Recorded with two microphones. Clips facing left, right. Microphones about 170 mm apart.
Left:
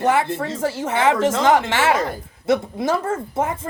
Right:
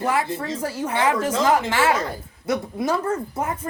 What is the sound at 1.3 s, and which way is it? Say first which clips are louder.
Speech: left 3 dB; 90° left.